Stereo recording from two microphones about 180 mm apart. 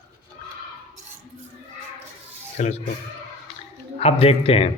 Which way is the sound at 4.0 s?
35° left (ahead or behind).